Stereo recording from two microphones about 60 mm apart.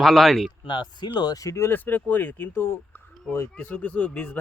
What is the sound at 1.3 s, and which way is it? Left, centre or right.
Speech, left.